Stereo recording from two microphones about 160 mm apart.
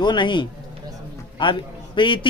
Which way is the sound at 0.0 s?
30° left (ahead or behind).